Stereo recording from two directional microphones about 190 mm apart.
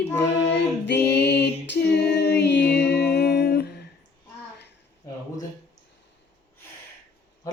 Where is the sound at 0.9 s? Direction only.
60° left (ahead or behind).